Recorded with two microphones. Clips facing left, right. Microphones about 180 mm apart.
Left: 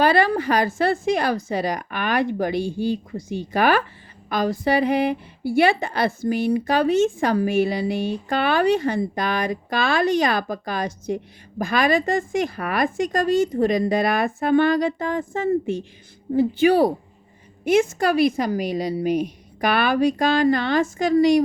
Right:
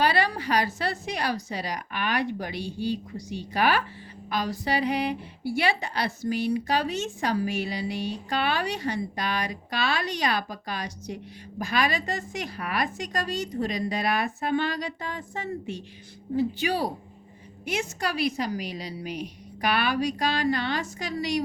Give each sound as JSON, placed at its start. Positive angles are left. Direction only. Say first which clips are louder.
{"t": 0.0, "sound": "a woman's voice", "louder": "left 7 dB", "side_deg": 50}